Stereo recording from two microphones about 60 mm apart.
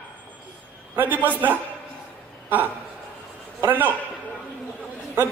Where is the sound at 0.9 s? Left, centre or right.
Right.